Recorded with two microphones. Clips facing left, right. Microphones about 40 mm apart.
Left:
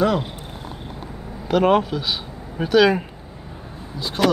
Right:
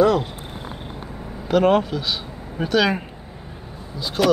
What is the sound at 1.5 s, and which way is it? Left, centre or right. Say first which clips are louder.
Speech: even; centre.